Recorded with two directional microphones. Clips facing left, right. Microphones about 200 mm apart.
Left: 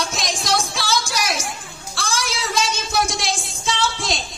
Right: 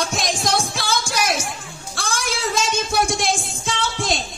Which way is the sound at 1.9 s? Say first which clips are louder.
Even; 50° right (ahead or behind).